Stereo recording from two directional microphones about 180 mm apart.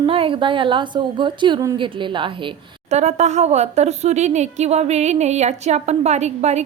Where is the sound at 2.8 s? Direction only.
40° right (ahead or behind).